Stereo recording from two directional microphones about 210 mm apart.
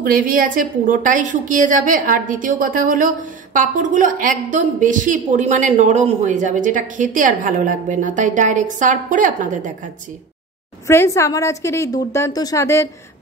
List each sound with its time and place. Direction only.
0.0 s a woman's voice: 40° right (ahead or behind)
10.9 s a woman's voice: 15° left (ahead or behind)